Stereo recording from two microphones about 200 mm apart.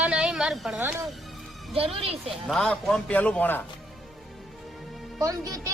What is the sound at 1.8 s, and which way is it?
Speech, 30° right (ahead or behind).